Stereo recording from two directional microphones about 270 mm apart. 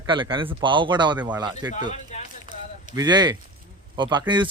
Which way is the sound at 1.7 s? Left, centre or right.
Left.